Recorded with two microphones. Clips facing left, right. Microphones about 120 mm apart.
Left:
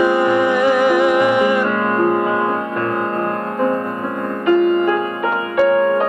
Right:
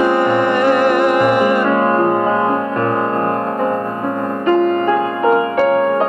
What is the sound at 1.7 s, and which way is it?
Music, 35° right (ahead or behind).